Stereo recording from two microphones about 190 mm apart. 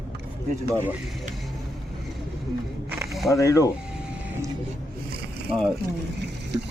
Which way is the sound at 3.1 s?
Centre (ahead or behind).